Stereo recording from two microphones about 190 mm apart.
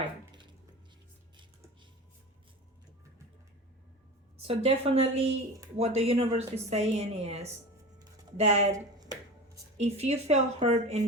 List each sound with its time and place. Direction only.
4.4 s a woman's voice: 30° right (ahead or behind)
8.7 s finger snapping: 20° right (ahead or behind)
9.7 s a woman's voice: 35° right (ahead or behind)